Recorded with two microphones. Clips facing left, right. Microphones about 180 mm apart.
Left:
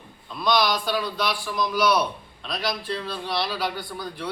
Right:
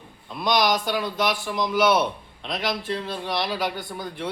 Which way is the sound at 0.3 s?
20° right (ahead or behind).